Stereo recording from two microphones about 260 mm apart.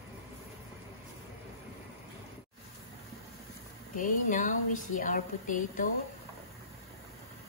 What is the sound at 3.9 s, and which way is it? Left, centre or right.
A woman's voice, left.